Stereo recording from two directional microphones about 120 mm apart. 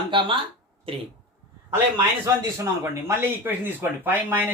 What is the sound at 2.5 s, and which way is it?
Speech, 20° right (ahead or behind).